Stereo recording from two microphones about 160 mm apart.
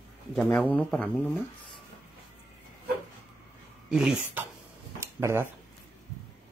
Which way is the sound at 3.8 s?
5° right (ahead or behind).